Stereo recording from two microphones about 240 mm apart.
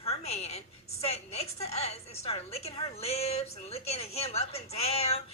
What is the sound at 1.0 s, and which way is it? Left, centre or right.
A woman's voice, left.